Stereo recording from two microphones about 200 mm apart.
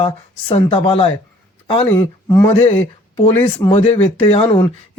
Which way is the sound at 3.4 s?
25° left (ahead or behind).